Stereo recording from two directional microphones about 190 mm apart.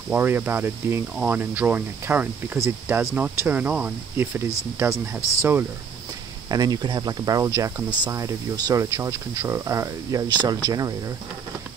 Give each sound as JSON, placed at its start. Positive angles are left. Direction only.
{"t": 0.1, "sound": "speech", "side_deg": -10}